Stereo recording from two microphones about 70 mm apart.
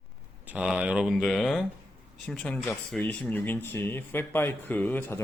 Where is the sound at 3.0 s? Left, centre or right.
Left.